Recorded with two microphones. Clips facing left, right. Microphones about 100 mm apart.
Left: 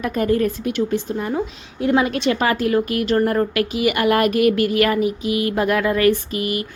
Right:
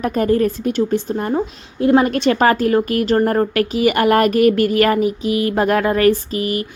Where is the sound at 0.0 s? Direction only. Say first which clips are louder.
Right 3 dB; 35° right (ahead or behind).